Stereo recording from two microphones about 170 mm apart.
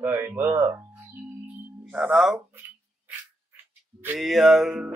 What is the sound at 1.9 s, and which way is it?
Speech, 5° right (ahead or behind).